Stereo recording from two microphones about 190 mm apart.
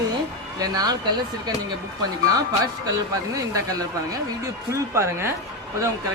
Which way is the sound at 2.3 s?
20° right (ahead or behind).